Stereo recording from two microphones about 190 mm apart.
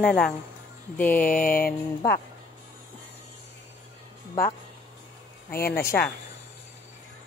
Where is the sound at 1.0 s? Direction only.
5° left (ahead or behind).